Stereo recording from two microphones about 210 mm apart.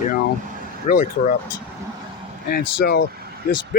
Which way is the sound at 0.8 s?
40° left (ahead or behind).